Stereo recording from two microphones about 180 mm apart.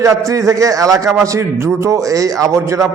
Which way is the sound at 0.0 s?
15° right (ahead or behind).